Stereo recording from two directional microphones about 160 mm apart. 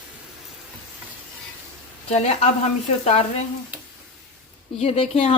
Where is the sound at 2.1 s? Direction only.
45° left (ahead or behind).